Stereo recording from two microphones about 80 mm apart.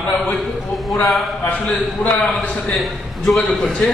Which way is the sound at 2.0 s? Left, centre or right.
Centre.